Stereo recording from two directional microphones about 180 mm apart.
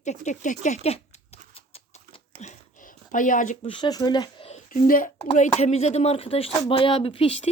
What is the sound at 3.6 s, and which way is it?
Speech, 25° left (ahead or behind).